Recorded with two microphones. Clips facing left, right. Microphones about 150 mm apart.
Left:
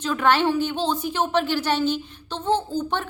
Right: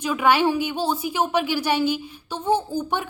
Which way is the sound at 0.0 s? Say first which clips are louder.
Right 1 dB; 10° right (ahead or behind).